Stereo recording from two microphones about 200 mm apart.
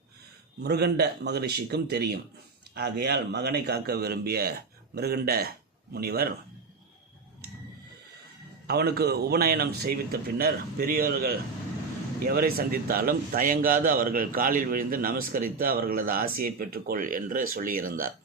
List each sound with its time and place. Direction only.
0.6 s a man's voice: 55° right (ahead or behind)
8.6 s a man's voice: 50° right (ahead or behind)